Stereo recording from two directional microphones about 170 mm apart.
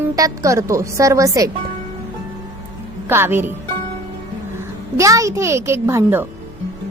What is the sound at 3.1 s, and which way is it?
Speech, 15° right (ahead or behind).